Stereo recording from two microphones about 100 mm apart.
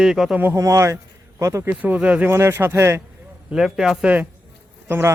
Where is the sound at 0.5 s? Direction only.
30° right (ahead or behind).